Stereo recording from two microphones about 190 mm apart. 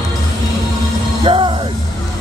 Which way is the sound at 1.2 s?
25° right (ahead or behind).